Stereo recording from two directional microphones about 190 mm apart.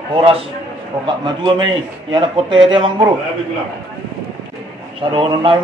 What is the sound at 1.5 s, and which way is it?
A man's voice, 25° right (ahead or behind).